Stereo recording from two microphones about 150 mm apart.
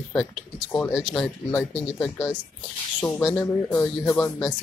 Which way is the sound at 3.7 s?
15° left (ahead or behind).